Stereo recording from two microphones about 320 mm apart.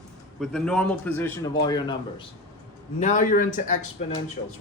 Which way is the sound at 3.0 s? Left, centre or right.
Left.